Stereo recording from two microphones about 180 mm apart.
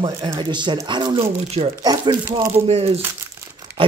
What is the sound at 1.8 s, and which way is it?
Speech, 20° right (ahead or behind).